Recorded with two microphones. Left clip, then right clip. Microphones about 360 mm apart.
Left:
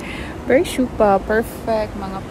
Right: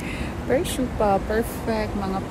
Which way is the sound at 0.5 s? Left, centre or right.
Left.